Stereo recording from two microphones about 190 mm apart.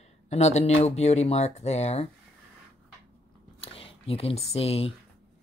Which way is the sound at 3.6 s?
30° left (ahead or behind).